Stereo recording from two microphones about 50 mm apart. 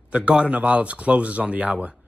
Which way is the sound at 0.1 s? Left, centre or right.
Right.